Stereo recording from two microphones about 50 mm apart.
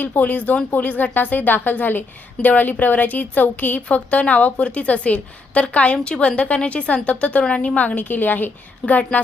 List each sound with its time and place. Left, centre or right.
0.0 s speech: left
3.8 s a woman's voice: left
7.8 s speech: left